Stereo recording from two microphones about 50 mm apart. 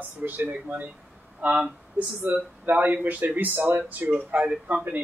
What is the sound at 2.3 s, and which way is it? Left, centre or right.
Speech, right.